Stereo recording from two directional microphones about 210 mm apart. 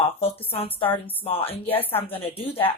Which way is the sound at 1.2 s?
25° left (ahead or behind).